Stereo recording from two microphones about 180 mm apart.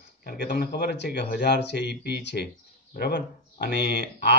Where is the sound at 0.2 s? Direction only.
65° left (ahead or behind).